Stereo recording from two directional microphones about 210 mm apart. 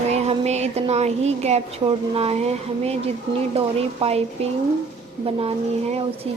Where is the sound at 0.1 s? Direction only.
30° right (ahead or behind).